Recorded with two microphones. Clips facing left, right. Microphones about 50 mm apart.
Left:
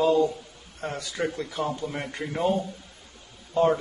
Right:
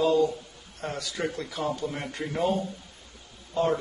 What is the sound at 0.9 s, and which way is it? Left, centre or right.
Speech, left.